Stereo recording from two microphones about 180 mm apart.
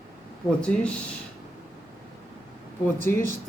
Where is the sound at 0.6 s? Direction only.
5° left (ahead or behind).